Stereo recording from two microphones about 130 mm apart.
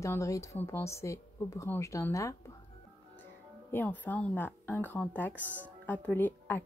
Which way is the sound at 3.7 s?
15° left (ahead or behind).